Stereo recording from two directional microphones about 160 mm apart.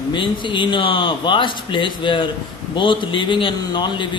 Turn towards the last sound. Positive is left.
turn(degrees=30)  # may be behind; listen again after turning